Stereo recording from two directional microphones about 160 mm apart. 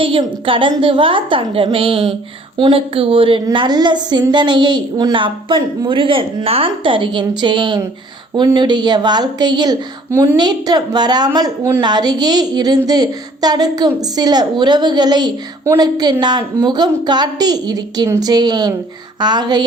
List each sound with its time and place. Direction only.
0.0 s a woman's voice: 35° right (ahead or behind)
10.1 s a woman's voice: 15° right (ahead or behind)